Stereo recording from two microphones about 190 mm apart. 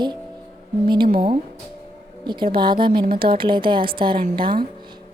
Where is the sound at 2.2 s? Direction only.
25° right (ahead or behind).